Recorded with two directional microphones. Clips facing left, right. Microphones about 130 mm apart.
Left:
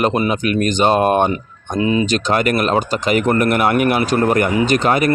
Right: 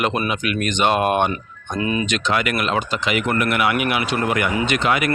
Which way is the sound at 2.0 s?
40° left (ahead or behind).